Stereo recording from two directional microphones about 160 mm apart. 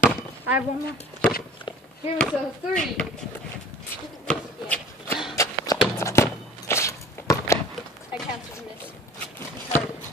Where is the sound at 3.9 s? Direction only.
10° left (ahead or behind).